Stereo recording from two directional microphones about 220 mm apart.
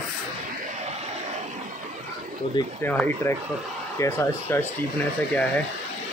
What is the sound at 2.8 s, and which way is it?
Speech, 5° left (ahead or behind).